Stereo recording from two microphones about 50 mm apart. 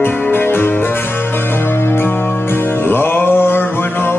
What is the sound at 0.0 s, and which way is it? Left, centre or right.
Music, left.